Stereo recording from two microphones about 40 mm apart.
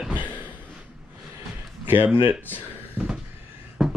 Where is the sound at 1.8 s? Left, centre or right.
Right.